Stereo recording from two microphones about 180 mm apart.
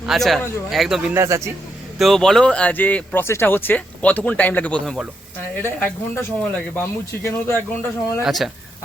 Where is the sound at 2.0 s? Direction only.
Centre (ahead or behind).